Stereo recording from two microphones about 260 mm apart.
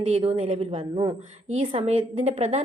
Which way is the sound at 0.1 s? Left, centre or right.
Right.